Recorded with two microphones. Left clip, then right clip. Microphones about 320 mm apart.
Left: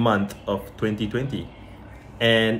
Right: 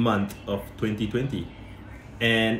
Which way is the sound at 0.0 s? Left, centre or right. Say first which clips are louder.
Left 4 dB; centre.